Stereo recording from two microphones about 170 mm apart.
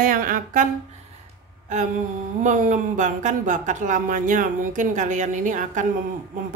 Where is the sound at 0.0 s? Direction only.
55° right (ahead or behind).